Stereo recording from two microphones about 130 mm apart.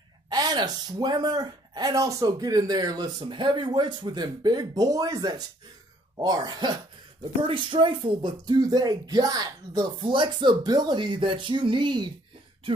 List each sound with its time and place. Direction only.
0.3 s speech: 30° right (ahead or behind)